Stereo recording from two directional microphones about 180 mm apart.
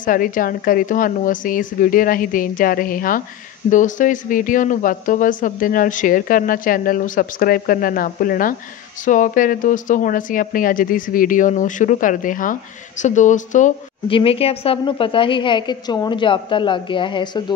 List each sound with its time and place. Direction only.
0.0 s speech: 50° left (ahead or behind)
14.0 s a woman's voice: 30° left (ahead or behind)